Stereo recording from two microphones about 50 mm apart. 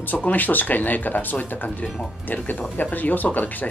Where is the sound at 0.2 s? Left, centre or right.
Left.